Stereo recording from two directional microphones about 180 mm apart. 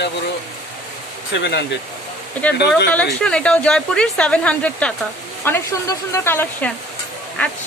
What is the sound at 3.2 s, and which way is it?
Speech, 5° left (ahead or behind).